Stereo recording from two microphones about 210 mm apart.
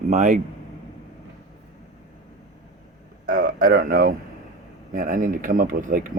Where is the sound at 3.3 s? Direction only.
40° right (ahead or behind).